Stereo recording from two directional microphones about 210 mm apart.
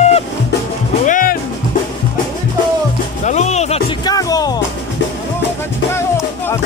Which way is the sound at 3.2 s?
35° left (ahead or behind).